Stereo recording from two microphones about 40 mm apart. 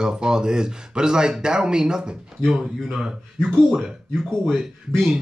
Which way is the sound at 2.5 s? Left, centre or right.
Centre.